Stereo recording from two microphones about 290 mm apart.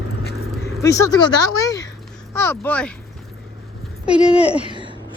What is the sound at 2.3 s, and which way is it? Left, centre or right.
Speech, centre.